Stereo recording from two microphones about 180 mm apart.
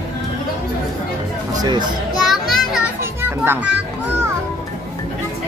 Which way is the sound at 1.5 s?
25° right (ahead or behind).